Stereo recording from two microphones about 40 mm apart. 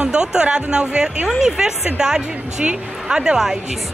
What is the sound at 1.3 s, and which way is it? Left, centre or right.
A woman's voice, centre.